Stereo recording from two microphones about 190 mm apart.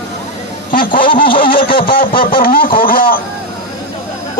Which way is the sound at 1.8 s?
50° left (ahead or behind).